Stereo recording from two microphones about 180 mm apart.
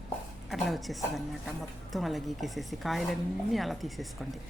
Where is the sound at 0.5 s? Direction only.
Centre (ahead or behind).